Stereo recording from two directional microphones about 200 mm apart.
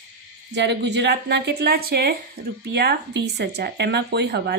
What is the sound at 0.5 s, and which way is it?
A woman's voice, 60° right (ahead or behind).